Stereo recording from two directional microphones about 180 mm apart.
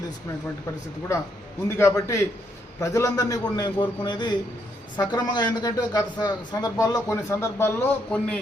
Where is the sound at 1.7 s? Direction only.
15° left (ahead or behind).